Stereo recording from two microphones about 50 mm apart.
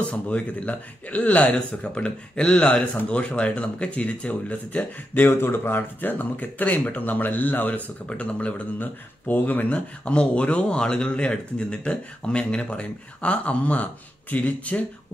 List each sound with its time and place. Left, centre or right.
0.1 s speech: left
5.2 s speech: left
8.7 s speech: left